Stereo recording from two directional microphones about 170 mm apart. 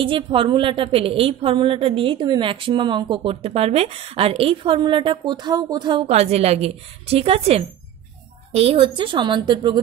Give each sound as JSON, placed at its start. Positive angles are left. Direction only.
{"t": 0.0, "sound": "a woman's voice", "side_deg": -30}
{"t": 6.0, "sound": "a woman's voice", "side_deg": -40}